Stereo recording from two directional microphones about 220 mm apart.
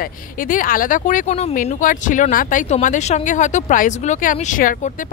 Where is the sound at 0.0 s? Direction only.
40° left (ahead or behind).